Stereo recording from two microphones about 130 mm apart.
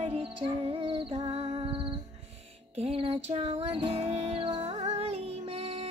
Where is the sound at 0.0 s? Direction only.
45° right (ahead or behind).